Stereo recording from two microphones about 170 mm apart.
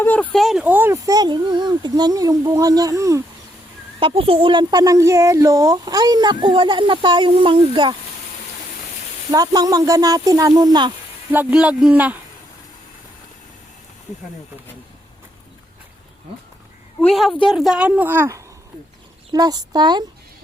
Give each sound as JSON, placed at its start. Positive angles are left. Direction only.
{"t": 0.0, "sound": "speech", "side_deg": 10}
{"t": 4.0, "sound": "speech", "side_deg": -35}
{"t": 9.3, "sound": "speech", "side_deg": -20}
{"t": 11.3, "sound": "a woman's voice", "side_deg": -10}
{"t": 17.0, "sound": "a woman's voice", "side_deg": 0}